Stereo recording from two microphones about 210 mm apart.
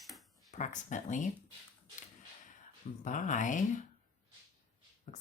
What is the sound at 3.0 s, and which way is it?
Speech, 35° left (ahead or behind).